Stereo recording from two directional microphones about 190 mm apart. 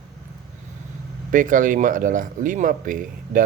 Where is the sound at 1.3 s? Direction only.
45° right (ahead or behind).